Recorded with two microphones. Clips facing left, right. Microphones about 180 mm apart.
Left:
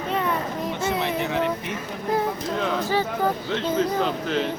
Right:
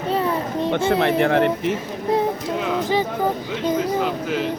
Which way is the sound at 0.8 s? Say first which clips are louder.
Right 7 dB; 60° right (ahead or behind).